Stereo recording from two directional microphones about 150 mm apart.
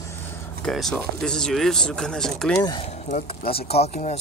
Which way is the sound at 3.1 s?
40° left (ahead or behind).